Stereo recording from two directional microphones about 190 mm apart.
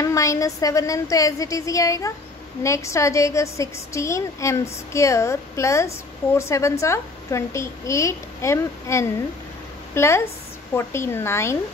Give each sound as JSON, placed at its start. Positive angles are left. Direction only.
{"t": 0.0, "sound": "a woman's voice", "side_deg": 15}